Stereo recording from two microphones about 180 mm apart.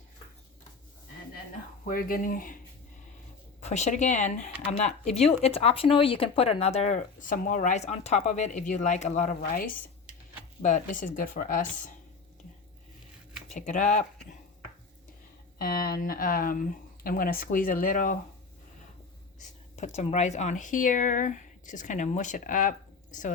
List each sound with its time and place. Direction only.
1.8 s speech: 55° left (ahead or behind)
3.6 s speech: 40° left (ahead or behind)
10.6 s speech: 45° left (ahead or behind)
13.5 s speech: 45° left (ahead or behind)
15.5 s speech: 55° left (ahead or behind)
19.4 s speech: 40° left (ahead or behind)